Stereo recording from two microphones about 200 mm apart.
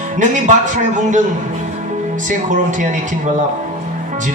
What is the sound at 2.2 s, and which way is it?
Speech, 40° right (ahead or behind).